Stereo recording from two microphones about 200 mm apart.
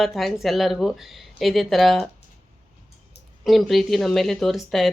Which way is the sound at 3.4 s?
Centre (ahead or behind).